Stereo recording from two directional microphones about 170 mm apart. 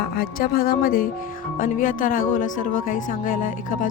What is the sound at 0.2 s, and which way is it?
Speech, 60° left (ahead or behind).